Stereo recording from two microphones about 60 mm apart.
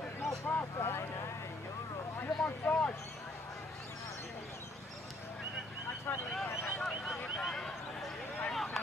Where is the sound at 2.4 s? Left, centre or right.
Left.